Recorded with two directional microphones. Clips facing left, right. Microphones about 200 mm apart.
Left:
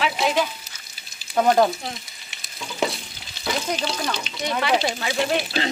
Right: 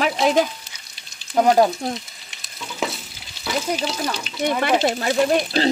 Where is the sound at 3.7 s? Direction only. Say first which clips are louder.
Right 2 dB; 5° right (ahead or behind).